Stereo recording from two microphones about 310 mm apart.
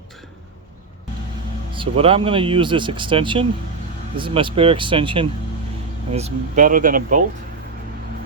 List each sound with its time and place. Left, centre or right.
1.7 s speech: centre